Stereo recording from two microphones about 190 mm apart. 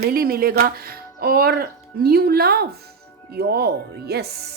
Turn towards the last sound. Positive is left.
turn(degrees=-60)  # may be behind; listen again after turning